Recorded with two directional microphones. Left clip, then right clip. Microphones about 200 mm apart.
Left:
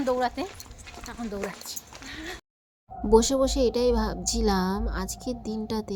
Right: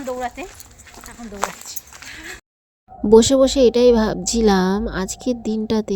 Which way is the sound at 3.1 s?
35° right (ahead or behind).